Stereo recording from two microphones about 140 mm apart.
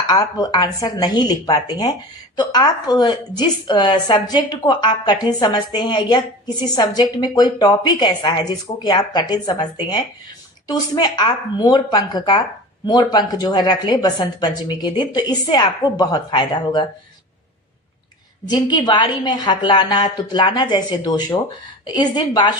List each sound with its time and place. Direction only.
0.1 s a woman's voice: 30° left (ahead or behind)
18.4 s speech: 30° left (ahead or behind)